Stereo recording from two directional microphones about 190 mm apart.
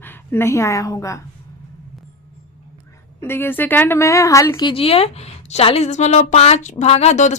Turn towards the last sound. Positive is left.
turn(degrees=35)  # may be behind; listen again after turning